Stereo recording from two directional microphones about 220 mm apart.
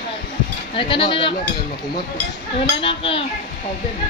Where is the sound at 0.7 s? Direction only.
25° left (ahead or behind).